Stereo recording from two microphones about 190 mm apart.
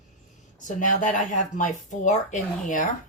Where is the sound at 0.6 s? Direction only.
40° left (ahead or behind).